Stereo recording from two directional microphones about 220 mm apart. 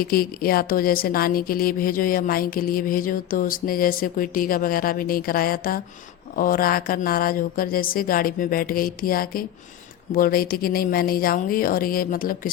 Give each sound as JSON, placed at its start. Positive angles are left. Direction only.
{"t": 0.0, "sound": "speech", "side_deg": 40}